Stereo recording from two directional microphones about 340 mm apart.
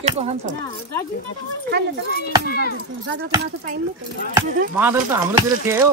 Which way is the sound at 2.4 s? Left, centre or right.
Left.